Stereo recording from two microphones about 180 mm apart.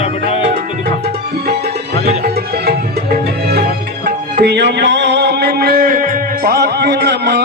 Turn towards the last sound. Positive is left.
turn(degrees=-65)  # may be behind; listen again after turning